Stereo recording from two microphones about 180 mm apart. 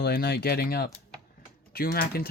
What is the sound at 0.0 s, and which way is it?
Speech, 55° left (ahead or behind).